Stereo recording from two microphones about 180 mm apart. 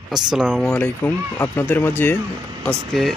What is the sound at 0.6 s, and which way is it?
Speech, 10° left (ahead or behind).